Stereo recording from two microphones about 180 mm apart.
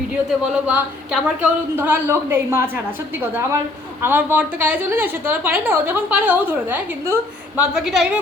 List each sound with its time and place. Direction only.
0.5 s a woman's voice: 5° right (ahead or behind)